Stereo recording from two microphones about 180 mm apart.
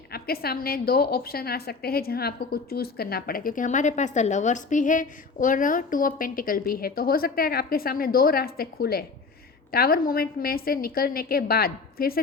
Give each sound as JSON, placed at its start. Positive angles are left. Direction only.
{"t": 0.1, "sound": "a woman's voice", "side_deg": 60}